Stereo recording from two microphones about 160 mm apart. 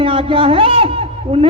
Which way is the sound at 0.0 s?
35° right (ahead or behind).